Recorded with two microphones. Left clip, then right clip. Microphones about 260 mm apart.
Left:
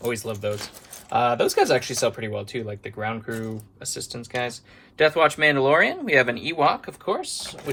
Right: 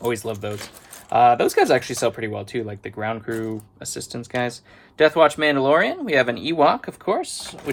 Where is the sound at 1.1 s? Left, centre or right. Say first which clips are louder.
Right 5 dB; right.